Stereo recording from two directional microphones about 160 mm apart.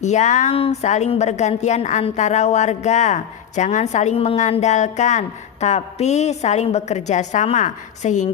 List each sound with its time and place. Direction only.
0.0 s speech: 45° left (ahead or behind)